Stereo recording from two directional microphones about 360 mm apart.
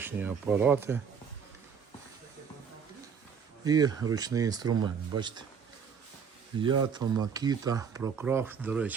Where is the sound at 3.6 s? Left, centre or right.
Centre.